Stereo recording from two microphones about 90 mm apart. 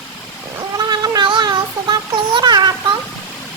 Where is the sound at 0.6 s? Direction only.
55° right (ahead or behind).